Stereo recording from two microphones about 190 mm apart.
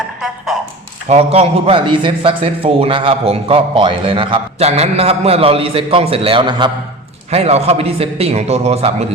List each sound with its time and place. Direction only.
1.0 s a man's voice: 35° right (ahead or behind)